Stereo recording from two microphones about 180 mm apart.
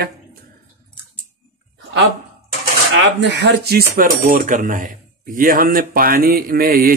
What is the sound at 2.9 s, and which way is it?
Speech, 80° right.